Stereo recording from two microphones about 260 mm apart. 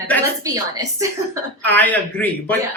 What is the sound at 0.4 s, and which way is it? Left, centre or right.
Speech, centre.